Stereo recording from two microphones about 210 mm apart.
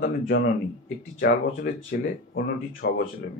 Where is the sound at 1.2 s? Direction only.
45° left (ahead or behind).